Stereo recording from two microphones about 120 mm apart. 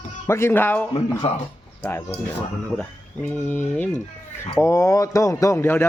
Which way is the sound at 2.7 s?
15° left (ahead or behind).